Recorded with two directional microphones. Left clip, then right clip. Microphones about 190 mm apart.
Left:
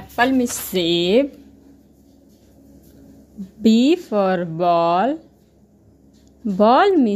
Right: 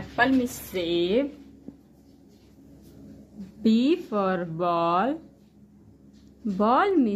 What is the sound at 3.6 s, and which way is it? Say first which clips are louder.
A woman's voice: left 7 dB; 30° left (ahead or behind).